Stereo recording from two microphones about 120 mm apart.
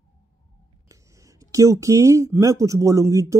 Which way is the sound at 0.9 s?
25° right (ahead or behind).